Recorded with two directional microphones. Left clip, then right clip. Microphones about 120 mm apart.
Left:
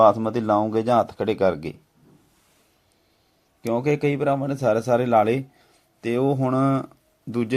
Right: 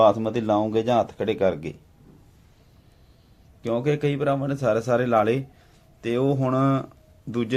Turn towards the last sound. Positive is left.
turn(degrees=25)  # may be behind; listen again after turning